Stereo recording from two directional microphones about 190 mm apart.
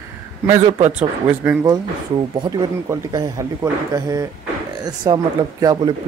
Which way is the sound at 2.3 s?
20° right (ahead or behind).